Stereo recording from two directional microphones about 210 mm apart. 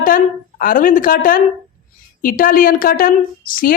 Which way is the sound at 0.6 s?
40° left (ahead or behind).